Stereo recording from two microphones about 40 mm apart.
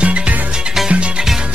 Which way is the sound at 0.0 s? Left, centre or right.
Right.